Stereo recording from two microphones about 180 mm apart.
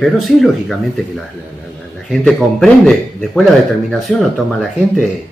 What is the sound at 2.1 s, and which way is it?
Speech, 5° left (ahead or behind).